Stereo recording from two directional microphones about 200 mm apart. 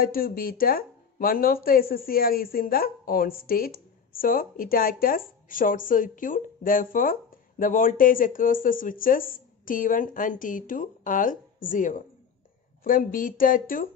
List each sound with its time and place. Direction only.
0.0 s speech: 45° left (ahead or behind)